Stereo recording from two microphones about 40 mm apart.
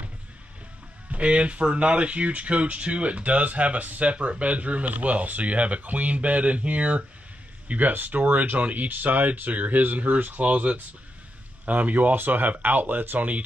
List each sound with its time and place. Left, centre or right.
1.1 s speech: right